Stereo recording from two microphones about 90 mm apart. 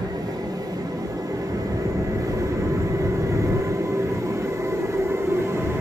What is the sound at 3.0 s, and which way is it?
Train, 35° right (ahead or behind).